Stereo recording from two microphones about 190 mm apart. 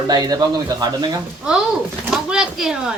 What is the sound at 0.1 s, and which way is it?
Speech, 20° right (ahead or behind).